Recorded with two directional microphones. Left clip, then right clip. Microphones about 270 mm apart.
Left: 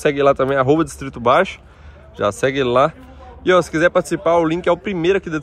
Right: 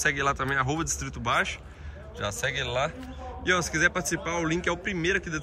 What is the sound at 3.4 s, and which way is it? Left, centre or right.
A man's voice, centre.